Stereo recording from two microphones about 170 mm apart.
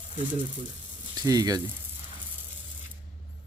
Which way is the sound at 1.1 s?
25° right (ahead or behind).